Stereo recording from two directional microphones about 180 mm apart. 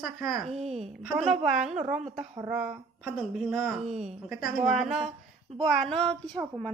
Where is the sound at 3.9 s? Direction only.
35° right (ahead or behind).